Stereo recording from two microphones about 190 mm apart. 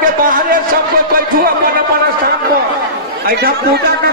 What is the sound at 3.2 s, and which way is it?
Speech, 50° right (ahead or behind).